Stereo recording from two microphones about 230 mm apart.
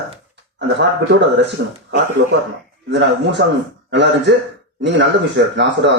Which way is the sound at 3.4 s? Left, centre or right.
Right.